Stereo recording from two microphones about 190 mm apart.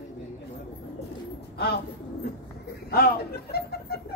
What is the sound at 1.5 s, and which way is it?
Bird, 55° left (ahead or behind).